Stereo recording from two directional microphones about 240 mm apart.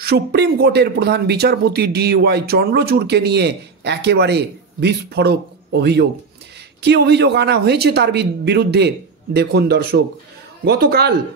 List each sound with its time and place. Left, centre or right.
0.0 s a man's voice: right